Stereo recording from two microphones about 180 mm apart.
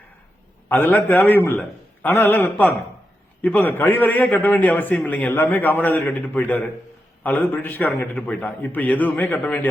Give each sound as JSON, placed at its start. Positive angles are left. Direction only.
{"t": 0.7, "sound": "a man's voice", "side_deg": 10}